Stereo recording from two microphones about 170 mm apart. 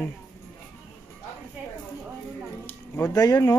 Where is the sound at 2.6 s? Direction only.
15° left (ahead or behind).